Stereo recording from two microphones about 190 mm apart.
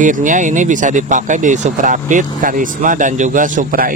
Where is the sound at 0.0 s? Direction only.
45° right (ahead or behind).